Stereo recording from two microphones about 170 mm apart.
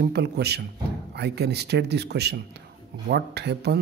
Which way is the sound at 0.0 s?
75° right (ahead or behind).